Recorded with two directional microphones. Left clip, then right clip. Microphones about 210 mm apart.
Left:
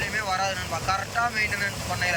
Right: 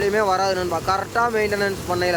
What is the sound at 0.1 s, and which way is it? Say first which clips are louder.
Speech: right 7 dB; 25° right (ahead or behind).